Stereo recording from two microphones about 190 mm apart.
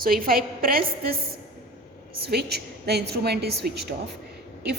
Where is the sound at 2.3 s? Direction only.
60° right (ahead or behind).